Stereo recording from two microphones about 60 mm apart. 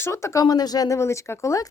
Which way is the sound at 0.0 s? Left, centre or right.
Left.